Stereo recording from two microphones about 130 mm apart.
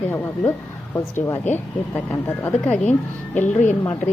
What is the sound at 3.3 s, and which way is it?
Speech, 70° left (ahead or behind).